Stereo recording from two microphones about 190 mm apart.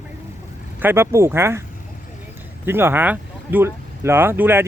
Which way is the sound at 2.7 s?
10° right (ahead or behind).